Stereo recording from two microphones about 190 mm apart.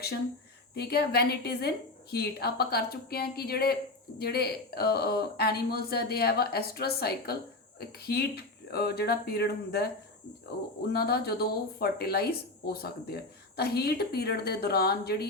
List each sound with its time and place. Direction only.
0.7 s speech: 55° left (ahead or behind)
10.9 s speech: 55° left (ahead or behind)